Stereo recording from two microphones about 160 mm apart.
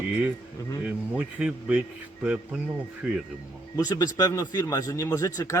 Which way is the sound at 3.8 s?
25° left (ahead or behind).